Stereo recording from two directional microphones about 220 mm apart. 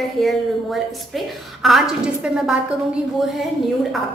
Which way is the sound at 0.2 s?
Centre (ahead or behind).